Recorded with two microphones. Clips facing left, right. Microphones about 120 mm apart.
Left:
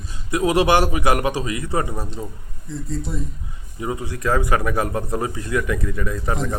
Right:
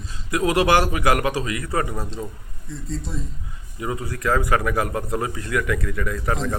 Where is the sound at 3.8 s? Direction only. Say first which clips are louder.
Left 1 dB; 25° left (ahead or behind).